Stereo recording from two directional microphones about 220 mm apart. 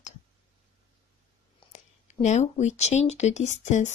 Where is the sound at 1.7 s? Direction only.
30° left (ahead or behind).